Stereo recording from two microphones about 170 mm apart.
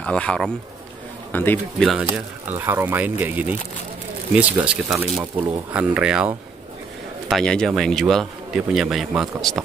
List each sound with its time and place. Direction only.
0.0 s a man's voice: 5° left (ahead or behind)
2.1 s a man's voice: 15° right (ahead or behind)